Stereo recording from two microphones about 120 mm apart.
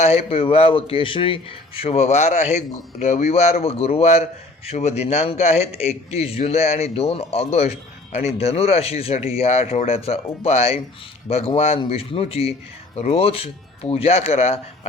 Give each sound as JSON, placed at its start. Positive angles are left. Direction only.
{"t": 0.0, "sound": "a man's voice", "side_deg": 55}